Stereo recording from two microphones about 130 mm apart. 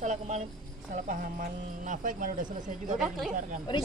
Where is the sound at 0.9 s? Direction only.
90° right.